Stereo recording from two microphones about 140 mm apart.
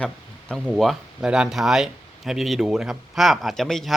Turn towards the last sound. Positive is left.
turn(degrees=5)  # may be behind; listen again after turning